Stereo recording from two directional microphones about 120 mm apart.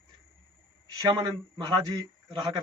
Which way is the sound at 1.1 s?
35° right (ahead or behind).